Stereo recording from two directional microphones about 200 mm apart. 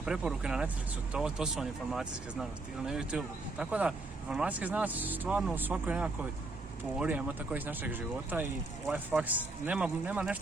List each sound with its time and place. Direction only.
0.0 s speech: 5° right (ahead or behind)